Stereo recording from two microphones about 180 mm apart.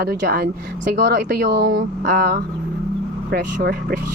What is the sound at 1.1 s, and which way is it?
Speech, 75° right (ahead or behind).